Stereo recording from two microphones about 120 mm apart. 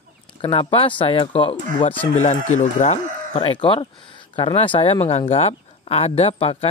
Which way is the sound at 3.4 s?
45° left (ahead or behind).